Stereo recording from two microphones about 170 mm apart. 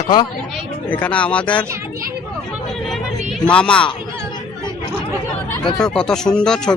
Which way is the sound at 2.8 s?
Centre (ahead or behind).